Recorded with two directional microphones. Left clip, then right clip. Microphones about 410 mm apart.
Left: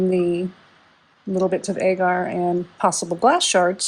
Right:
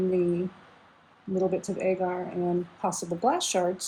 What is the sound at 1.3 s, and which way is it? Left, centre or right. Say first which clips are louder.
Speech: left 6 dB; centre.